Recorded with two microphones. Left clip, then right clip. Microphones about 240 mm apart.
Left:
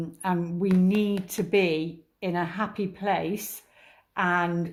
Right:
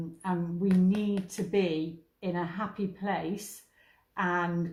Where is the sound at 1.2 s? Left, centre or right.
Left.